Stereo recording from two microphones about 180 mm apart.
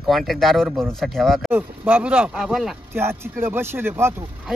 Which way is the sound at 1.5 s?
10° right (ahead or behind).